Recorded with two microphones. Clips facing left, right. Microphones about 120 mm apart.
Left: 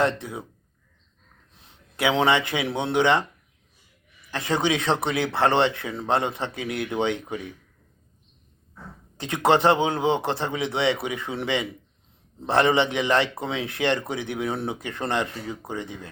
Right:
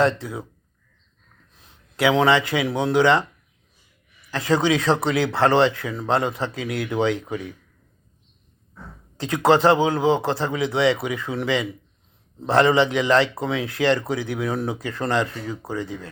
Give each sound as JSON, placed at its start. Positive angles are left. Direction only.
{"t": 0.0, "sound": "a man's voice", "side_deg": 25}
{"t": 1.5, "sound": "speech", "side_deg": 25}
{"t": 4.3, "sound": "a man's voice", "side_deg": 25}
{"t": 4.9, "sound": "speech", "side_deg": -30}
{"t": 5.1, "sound": "a man's voice", "side_deg": 25}
{"t": 9.1, "sound": "a man's voice", "side_deg": 25}